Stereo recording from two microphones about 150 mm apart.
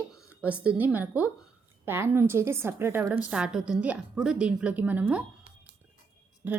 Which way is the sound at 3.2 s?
5° right (ahead or behind).